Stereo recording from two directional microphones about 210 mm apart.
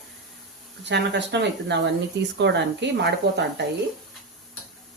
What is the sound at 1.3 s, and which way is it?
Speech, 55° right (ahead or behind).